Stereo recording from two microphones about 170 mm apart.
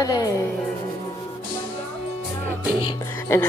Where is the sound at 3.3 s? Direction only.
15° left (ahead or behind).